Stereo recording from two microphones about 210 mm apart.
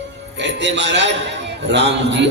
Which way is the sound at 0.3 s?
55° right (ahead or behind).